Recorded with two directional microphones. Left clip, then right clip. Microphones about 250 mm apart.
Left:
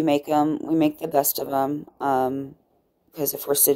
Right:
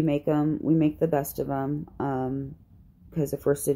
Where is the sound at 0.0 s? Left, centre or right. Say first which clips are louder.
Left 5 dB; left.